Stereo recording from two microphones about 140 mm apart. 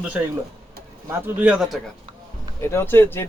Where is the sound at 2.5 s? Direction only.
20° left (ahead or behind).